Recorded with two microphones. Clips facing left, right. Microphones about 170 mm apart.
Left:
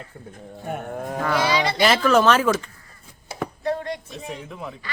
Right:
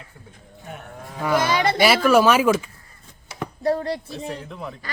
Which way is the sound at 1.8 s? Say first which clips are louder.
Right 1 dB; 10° right (ahead or behind).